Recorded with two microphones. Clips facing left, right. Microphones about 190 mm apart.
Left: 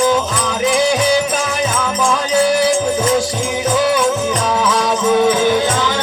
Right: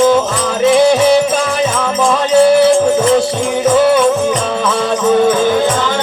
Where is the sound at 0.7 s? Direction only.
65° right (ahead or behind).